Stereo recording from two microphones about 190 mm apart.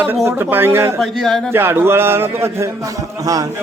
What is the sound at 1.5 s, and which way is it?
A man's voice, 10° right (ahead or behind).